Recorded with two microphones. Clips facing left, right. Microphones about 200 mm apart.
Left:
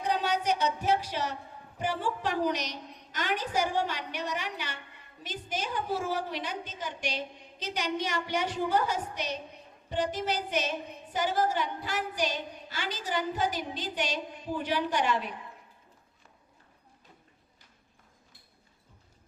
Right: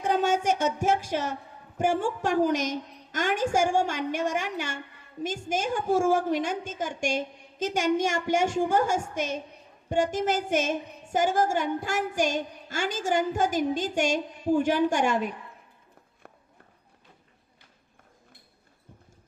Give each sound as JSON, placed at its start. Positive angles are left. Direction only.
{"t": 0.0, "sound": "a woman's voice", "side_deg": -45}
{"t": 16.2, "sound": "run", "side_deg": -65}